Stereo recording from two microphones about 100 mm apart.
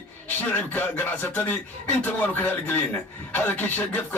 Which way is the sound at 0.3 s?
20° left (ahead or behind).